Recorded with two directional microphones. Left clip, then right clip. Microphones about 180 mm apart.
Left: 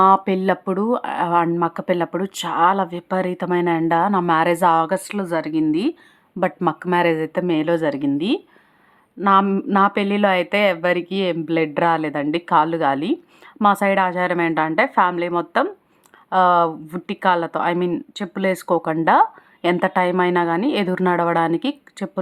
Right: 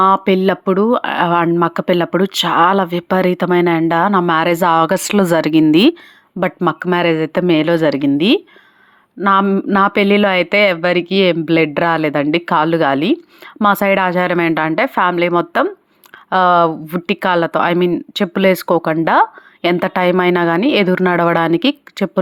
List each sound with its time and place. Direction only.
0.0 s speech: 20° right (ahead or behind); by 5.6 s 40° right (ahead or behind)
6.7 s speech: 20° right (ahead or behind)
9.5 s speech: 10° right (ahead or behind)
9.7 s a woman's voice: 25° right (ahead or behind)